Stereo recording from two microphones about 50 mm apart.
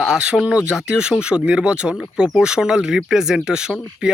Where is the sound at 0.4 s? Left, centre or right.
Right.